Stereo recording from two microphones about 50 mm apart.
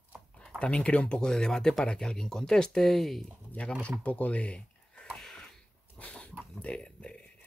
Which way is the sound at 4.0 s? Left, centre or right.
Left.